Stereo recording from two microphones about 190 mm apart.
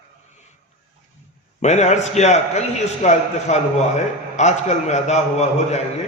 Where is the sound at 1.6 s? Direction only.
35° left (ahead or behind).